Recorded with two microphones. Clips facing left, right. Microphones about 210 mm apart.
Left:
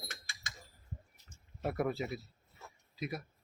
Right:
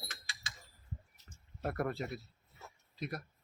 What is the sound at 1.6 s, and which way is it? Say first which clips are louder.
Speech: left 2 dB; 5° left (ahead or behind).